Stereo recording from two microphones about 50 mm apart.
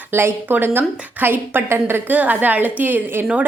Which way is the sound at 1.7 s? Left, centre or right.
Right.